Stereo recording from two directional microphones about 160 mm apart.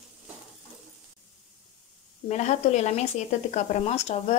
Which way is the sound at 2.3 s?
45° left (ahead or behind).